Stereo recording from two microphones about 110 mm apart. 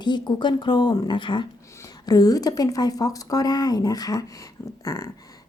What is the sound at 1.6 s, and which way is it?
Speech, 30° left (ahead or behind).